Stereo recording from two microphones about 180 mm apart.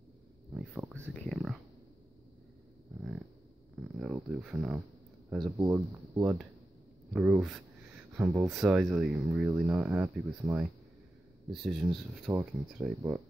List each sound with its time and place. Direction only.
0.6 s a sound: 5° right (ahead or behind)
0.9 s whispering: 5° left (ahead or behind)
3.7 s a sound: 5° right (ahead or behind)
5.6 s speech: 15° right (ahead or behind)
8.2 s speech: 15° right (ahead or behind)
8.5 s speech: 5° right (ahead or behind)